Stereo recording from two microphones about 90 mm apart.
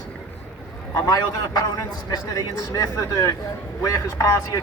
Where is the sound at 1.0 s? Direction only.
40° left (ahead or behind).